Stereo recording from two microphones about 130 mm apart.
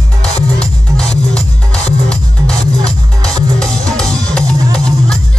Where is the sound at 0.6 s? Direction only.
5° left (ahead or behind).